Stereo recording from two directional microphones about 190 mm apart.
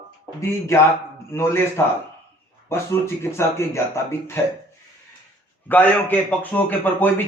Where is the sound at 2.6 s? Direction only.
15° left (ahead or behind).